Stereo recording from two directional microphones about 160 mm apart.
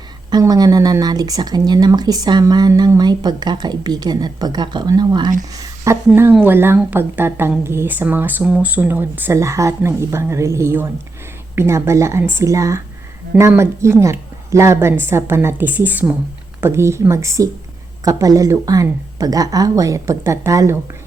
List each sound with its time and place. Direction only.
0.3 s speech: 25° right (ahead or behind)
5.4 s a sound: 20° right (ahead or behind)
6.1 s speech: 15° right (ahead or behind)